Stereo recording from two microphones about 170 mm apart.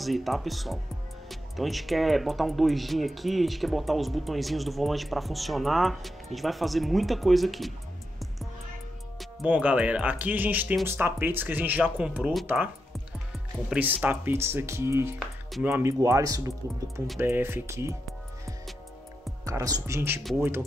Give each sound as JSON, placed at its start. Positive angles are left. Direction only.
{"t": 0.0, "sound": "speech", "side_deg": 0}
{"t": 9.2, "sound": "speech", "side_deg": -5}
{"t": 13.7, "sound": "speech", "side_deg": -10}
{"t": 19.4, "sound": "speech", "side_deg": -20}